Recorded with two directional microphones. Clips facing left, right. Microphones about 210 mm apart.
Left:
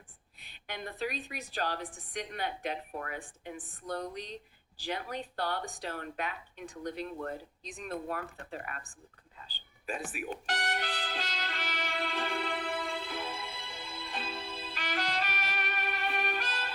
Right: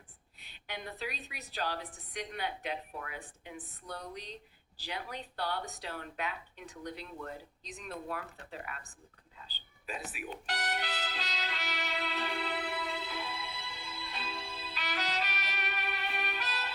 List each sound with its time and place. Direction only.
0.3 s speech: 45° left (ahead or behind)
9.5 s music: 50° left (ahead or behind)